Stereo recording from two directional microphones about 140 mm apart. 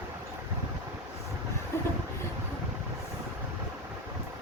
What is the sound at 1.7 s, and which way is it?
Vehicle, 20° left (ahead or behind).